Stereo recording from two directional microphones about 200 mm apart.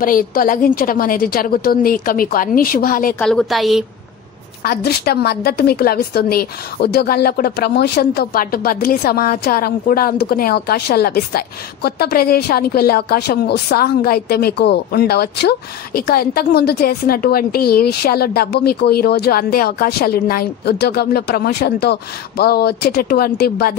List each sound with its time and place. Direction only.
0.0 s a woman's voice: 45° left (ahead or behind)
3.2 s a woman's voice: 5° left (ahead or behind)
4.6 s a woman's voice: 55° left (ahead or behind)